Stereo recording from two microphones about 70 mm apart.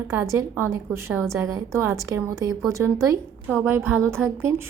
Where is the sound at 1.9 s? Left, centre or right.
Right.